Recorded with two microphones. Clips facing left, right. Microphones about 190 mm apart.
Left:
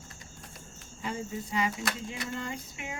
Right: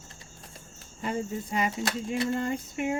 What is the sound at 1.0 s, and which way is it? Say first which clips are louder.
Speech: right 4 dB; 55° right (ahead or behind).